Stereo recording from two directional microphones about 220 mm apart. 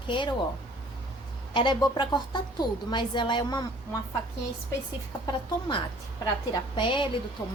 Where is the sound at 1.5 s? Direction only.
20° left (ahead or behind).